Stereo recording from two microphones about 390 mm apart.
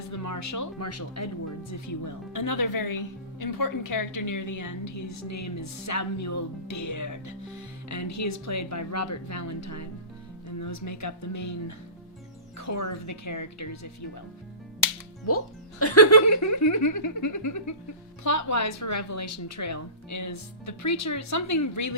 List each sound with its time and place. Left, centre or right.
0.1 s a woman's voice: left
12.5 s a woman's voice: left
15.8 s a woman's voice: left